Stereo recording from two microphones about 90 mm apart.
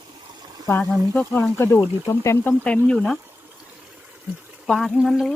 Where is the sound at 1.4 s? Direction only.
25° left (ahead or behind).